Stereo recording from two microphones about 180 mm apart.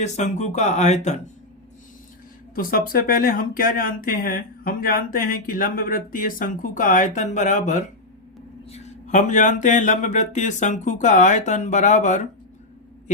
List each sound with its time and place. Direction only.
0.0 s speech: 40° left (ahead or behind)
2.6 s speech: 50° left (ahead or behind)